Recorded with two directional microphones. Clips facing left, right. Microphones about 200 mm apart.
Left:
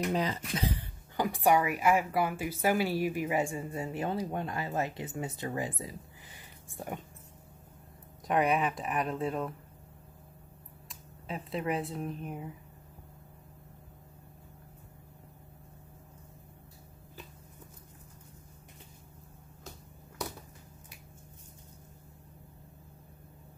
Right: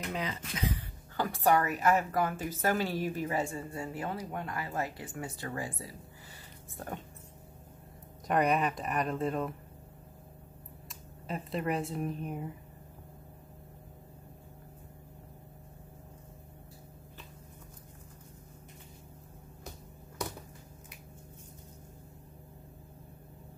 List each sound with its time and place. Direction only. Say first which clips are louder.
0.1 s speech: left 5 dB; 35° left (ahead or behind)
1.1 s a woman's voice: left 1 dB; 15° left (ahead or behind)
8.3 s speech: even; centre (ahead or behind)
10.9 s speech: right 1 dB; centre (ahead or behind)